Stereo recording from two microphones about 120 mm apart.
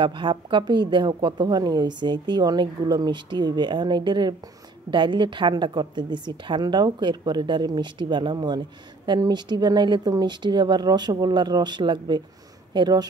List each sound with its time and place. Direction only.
0.0 s a woman's voice: 40° right (ahead or behind)